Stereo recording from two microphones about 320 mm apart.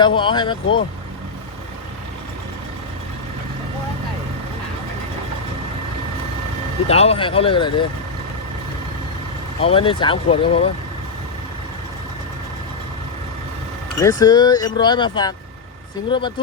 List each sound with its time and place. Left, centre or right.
0.0 s speech: centre
6.8 s speech: centre
9.6 s speech: centre
14.0 s speech: centre